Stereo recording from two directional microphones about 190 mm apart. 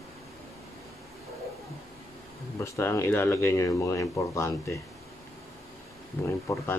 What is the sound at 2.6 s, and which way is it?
Speech, 15° left (ahead or behind).